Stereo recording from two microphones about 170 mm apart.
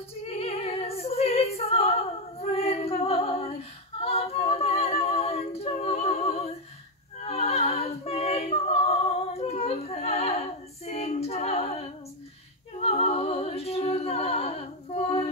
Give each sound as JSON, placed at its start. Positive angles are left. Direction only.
{"t": 0.3, "sound": "female singing", "side_deg": 35}
{"t": 4.0, "sound": "a capella", "side_deg": 35}
{"t": 12.8, "sound": "music", "side_deg": 40}